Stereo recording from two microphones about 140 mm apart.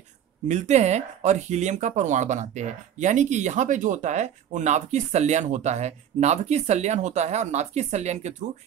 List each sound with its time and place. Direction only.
0.5 s speech: 55° right (ahead or behind)